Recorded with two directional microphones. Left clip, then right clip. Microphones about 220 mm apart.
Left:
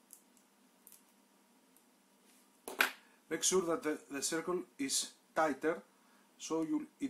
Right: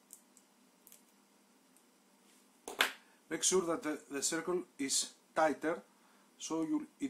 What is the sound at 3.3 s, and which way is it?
Speech, 5° left (ahead or behind).